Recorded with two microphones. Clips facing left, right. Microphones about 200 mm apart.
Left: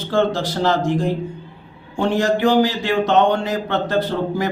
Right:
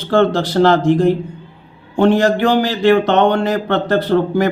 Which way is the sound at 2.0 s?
65° right (ahead or behind).